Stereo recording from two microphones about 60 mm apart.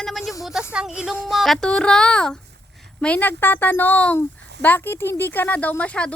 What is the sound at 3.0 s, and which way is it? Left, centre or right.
Speech, left.